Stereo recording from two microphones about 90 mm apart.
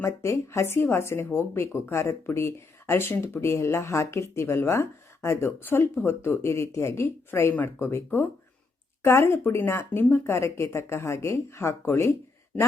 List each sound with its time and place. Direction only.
0.0 s speech: 30° left (ahead or behind)
10.3 s speech: 35° left (ahead or behind)